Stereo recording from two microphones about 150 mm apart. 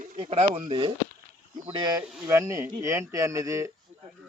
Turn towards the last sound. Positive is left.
turn(degrees=-20)  # may be behind; listen again after turning